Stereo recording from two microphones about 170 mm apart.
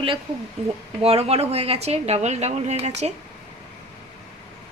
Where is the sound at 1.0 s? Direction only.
35° right (ahead or behind).